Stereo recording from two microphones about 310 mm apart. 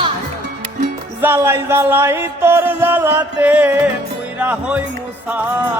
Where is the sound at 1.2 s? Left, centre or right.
Centre.